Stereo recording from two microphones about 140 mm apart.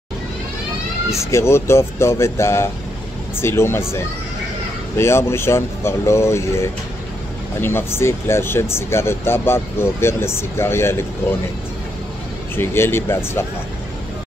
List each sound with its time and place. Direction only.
1.3 s speech: 20° left (ahead or behind)
12.5 s speech: 15° left (ahead or behind)